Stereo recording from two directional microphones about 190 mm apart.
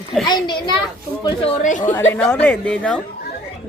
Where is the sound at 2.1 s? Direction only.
10° left (ahead or behind).